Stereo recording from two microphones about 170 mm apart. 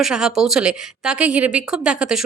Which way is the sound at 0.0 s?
5° right (ahead or behind).